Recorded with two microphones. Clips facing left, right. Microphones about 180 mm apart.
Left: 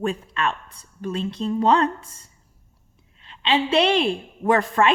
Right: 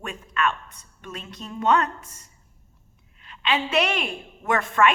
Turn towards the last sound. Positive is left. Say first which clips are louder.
# left 2 dB
turn(degrees=35)  # may be behind; listen again after turning